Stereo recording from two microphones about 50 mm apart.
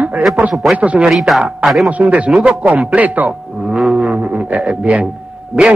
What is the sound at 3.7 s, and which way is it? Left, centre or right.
Didgeridoo, centre.